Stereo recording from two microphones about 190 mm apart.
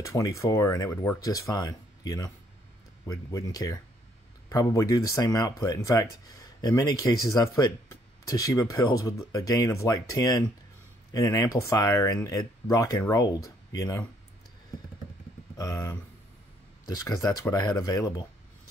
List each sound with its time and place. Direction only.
0.0 s speech: 15° left (ahead or behind)
15.5 s speech: 20° left (ahead or behind)